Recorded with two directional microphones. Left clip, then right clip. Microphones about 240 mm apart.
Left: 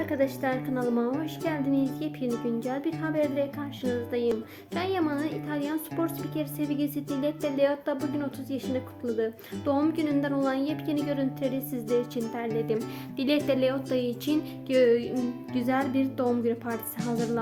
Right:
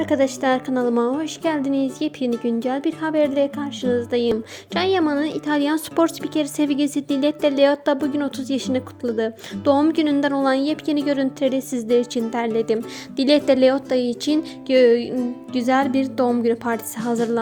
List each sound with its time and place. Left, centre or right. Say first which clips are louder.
0.0 s a woman's voice: right 8 dB; right